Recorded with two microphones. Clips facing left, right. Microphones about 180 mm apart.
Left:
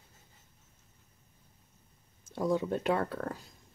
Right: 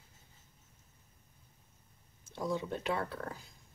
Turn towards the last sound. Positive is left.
turn(degrees=45)  # may be behind; listen again after turning